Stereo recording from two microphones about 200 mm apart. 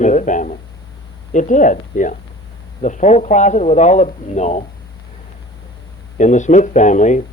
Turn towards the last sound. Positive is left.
turn(degrees=40)  # may be behind; listen again after turning